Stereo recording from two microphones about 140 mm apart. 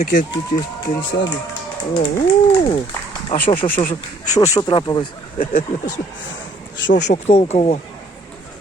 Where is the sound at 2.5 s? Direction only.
35° left (ahead or behind).